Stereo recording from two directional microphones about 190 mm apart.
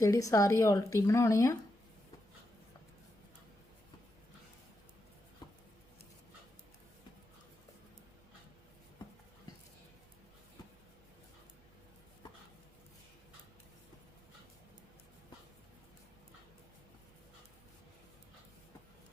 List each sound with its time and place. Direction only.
0.0 s speech: 15° left (ahead or behind)